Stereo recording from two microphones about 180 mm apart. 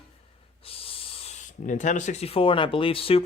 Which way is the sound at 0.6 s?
30° left (ahead or behind).